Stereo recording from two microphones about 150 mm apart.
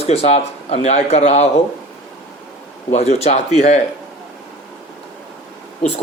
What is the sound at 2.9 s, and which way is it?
Speech, 45° left (ahead or behind).